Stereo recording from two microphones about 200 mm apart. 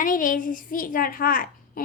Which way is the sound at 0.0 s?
40° left (ahead or behind).